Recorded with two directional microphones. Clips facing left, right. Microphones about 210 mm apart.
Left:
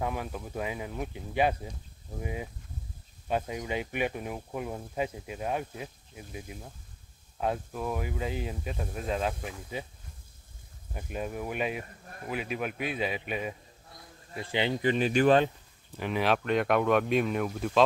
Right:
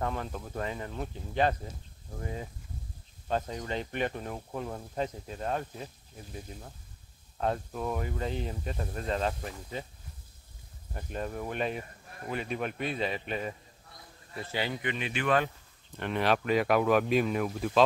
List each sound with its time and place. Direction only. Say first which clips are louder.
0.0 s speech: left 1 dB; 10° left (ahead or behind)
10.9 s speech: left 1 dB; 5° left (ahead or behind); by 15.5 s 30° left (ahead or behind)
16.0 s speech: even; centre (ahead or behind)